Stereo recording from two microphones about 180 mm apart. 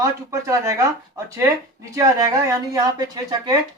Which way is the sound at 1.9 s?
20° right (ahead or behind).